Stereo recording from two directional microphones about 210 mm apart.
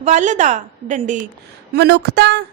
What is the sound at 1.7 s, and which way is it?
Speech, 55° right (ahead or behind).